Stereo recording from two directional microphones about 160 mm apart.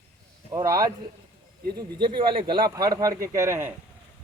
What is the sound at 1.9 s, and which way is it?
Speech, 30° right (ahead or behind).